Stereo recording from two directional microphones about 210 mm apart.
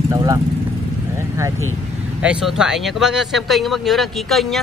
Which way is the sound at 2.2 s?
5° right (ahead or behind).